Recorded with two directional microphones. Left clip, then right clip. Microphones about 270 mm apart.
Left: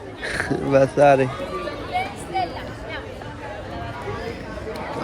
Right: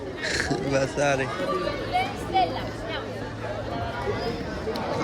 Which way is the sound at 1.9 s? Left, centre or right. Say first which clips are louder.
Even; right.